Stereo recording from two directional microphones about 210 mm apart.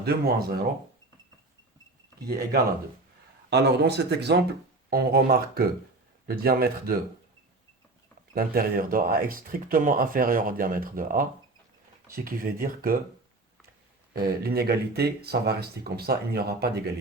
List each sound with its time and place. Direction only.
0.0 s speech: 50° right (ahead or behind)
3.5 s speech: 50° right (ahead or behind)
8.4 s speech: 45° right (ahead or behind)
14.1 s speech: 50° right (ahead or behind)